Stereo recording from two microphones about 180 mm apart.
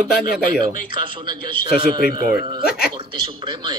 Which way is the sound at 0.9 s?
25° right (ahead or behind).